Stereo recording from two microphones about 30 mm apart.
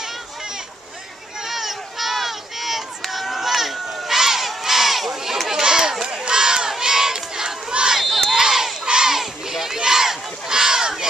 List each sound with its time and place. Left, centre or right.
1.4 s run: centre
4.5 s crowd: centre
5.5 s a sound: centre
6.2 s crowd: right
7.8 s crowd: right
8.1 s crowd: centre
8.4 s crowd: centre
8.8 s a sound: right
9.1 s a sound: centre